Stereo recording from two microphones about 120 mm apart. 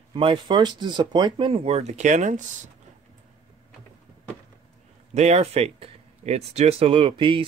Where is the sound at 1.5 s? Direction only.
60° right (ahead or behind); by 2.7 s 90° right.